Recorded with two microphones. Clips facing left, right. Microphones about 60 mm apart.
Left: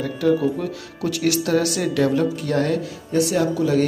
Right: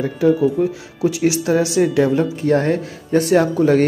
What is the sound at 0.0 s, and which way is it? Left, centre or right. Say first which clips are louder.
Speech: right 4 dB; centre.